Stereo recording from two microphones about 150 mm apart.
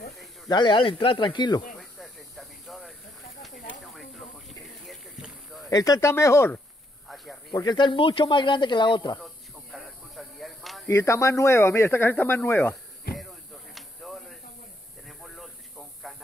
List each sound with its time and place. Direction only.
0.5 s speech: 30° left (ahead or behind)
1.8 s snake: centre (ahead or behind)
5.7 s speech: 25° left (ahead or behind)
7.5 s speech: 30° left (ahead or behind)
9.2 s a sound: centre (ahead or behind)
10.9 s speech: 20° left (ahead or behind)
13.1 s a sound: centre (ahead or behind)